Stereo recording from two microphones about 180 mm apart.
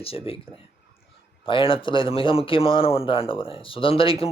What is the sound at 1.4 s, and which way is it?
A man's voice, 30° left (ahead or behind).